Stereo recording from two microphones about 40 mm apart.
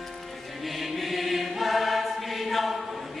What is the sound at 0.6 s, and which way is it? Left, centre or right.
Choir, centre.